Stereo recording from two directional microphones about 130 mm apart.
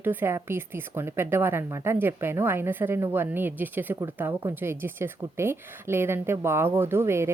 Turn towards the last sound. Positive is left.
turn(degrees=-20)  # may be behind; listen again after turning